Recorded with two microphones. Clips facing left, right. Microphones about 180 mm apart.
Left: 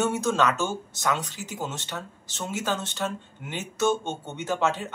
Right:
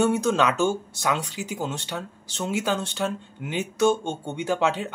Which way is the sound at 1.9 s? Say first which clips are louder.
Right 3 dB; 10° right (ahead or behind).